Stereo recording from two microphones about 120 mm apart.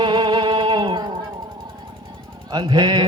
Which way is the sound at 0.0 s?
40° right (ahead or behind).